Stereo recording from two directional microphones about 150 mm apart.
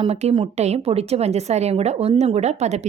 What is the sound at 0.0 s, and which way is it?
A woman's voice, 45° right (ahead or behind).